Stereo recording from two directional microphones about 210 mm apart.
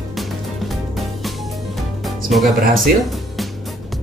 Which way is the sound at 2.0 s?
Centre (ahead or behind).